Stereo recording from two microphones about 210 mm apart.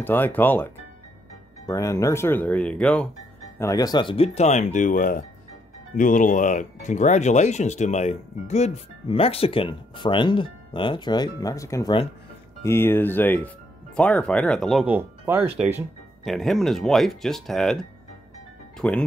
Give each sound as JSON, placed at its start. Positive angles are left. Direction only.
{"t": 0.0, "sound": "speech", "side_deg": 10}
{"t": 1.7, "sound": "speech", "side_deg": 15}
{"t": 18.8, "sound": "speech", "side_deg": 5}